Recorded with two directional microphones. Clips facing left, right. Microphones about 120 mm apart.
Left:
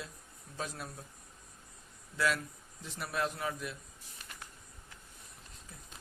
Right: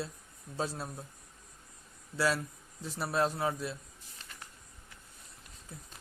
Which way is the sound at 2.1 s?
35° right (ahead or behind).